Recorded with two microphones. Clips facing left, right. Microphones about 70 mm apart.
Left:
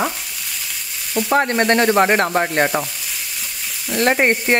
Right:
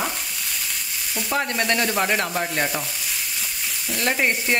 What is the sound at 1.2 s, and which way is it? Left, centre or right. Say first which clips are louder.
Sizzle: left 7 dB; left.